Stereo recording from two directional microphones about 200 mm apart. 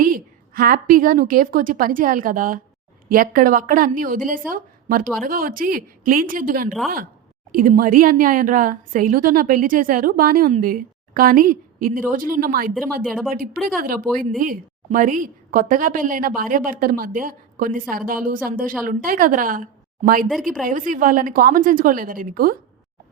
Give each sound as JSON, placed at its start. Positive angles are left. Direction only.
{"t": 0.0, "sound": "a woman's voice", "side_deg": -45}
{"t": 13.0, "sound": "a woman's voice", "side_deg": 0}
{"t": 13.3, "sound": "a woman's voice", "side_deg": -45}
{"t": 20.2, "sound": "a woman's voice", "side_deg": 0}
{"t": 20.7, "sound": "a woman's voice", "side_deg": -40}